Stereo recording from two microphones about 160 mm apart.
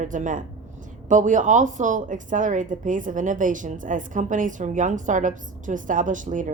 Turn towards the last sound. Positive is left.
turn(degrees=-55)  # may be behind; listen again after turning